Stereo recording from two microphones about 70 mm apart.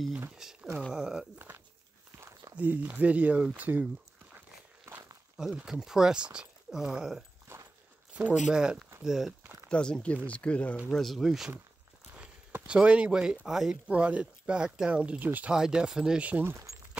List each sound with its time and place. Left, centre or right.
0.4 s speech: centre
2.5 s speech: right
5.4 s speech: centre
7.5 s dog: right
8.1 s a sound: right
8.5 s speech: centre
9.7 s speech: centre
10.9 s speech: centre
12.6 s speech: centre
13.8 s speech: centre
15.5 s speech: centre
16.4 s speech: right